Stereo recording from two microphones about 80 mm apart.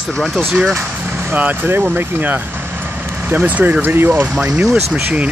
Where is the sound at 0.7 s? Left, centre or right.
Right.